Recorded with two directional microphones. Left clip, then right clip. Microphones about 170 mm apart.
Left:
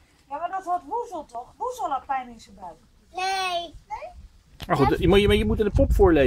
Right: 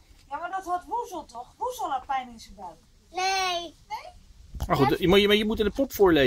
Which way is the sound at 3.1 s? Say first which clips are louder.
Even; 10° left (ahead or behind).